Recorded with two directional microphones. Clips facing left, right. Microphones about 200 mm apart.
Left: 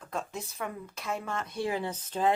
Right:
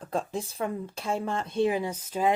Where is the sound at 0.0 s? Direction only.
35° right (ahead or behind).